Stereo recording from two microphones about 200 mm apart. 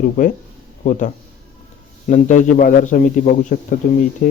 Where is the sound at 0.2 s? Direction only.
40° left (ahead or behind).